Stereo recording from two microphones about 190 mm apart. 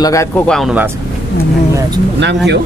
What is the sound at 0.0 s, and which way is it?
Speech, 15° left (ahead or behind).